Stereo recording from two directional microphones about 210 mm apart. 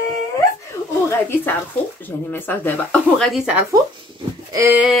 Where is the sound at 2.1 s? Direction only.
10° left (ahead or behind).